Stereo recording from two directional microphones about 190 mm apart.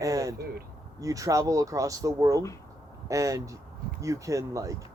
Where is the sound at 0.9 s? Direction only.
15° right (ahead or behind).